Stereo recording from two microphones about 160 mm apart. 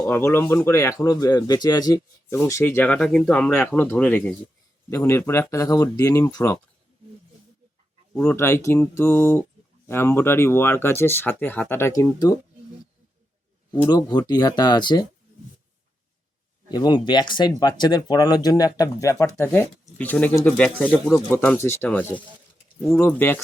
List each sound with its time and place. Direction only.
0.0 s speech: 15° left (ahead or behind)
8.1 s speech: 15° left (ahead or behind)
13.9 s speech: 25° left (ahead or behind)
16.7 s speech: 25° left (ahead or behind)